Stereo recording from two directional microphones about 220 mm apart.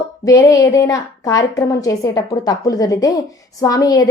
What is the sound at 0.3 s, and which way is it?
A woman's voice, 15° left (ahead or behind).